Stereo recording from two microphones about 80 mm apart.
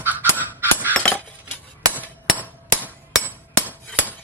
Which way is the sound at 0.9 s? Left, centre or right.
Centre.